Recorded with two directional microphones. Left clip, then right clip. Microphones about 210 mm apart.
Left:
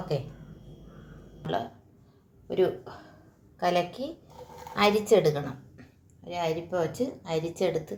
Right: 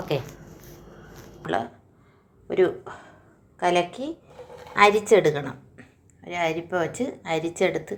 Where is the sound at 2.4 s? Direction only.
10° right (ahead or behind).